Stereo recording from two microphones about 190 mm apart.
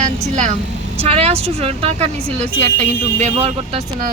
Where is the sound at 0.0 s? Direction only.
40° right (ahead or behind).